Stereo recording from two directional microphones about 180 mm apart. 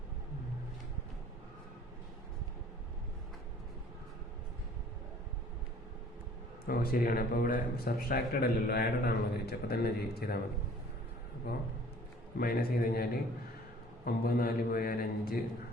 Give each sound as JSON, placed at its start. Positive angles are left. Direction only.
{"t": 6.7, "sound": "speech", "side_deg": 55}
{"t": 11.5, "sound": "speech", "side_deg": 60}